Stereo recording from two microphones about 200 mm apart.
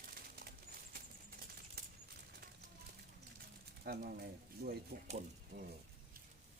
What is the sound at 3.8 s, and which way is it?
Speech, 50° right (ahead or behind).